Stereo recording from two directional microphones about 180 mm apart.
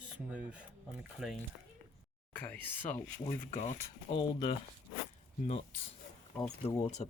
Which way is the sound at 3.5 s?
35° left (ahead or behind).